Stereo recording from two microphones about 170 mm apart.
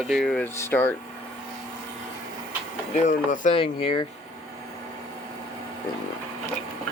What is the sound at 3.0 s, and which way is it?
Speech, 50° left (ahead or behind).